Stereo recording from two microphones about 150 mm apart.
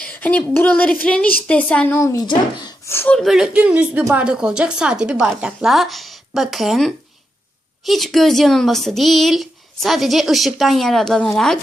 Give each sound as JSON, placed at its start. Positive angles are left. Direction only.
{"t": 0.0, "sound": "a woman's voice", "side_deg": 10}
{"t": 2.0, "sound": "a woman's voice", "side_deg": 20}
{"t": 2.2, "sound": "speech", "side_deg": 30}
{"t": 2.9, "sound": "a woman's voice", "side_deg": 15}
{"t": 3.2, "sound": "speech", "side_deg": 0}